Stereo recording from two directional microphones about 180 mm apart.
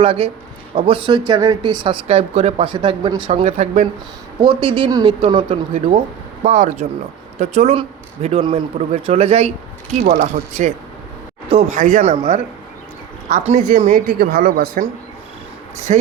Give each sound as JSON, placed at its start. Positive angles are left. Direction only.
{"t": 0.0, "sound": "speech", "side_deg": -30}
{"t": 4.4, "sound": "speech", "side_deg": -30}
{"t": 6.4, "sound": "speech", "side_deg": -40}
{"t": 10.0, "sound": "a woman's voice", "side_deg": -55}
{"t": 13.2, "sound": "a woman's voice", "side_deg": -40}
{"t": 15.9, "sound": "speech", "side_deg": -40}